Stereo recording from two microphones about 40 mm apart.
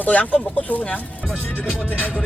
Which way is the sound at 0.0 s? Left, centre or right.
Left.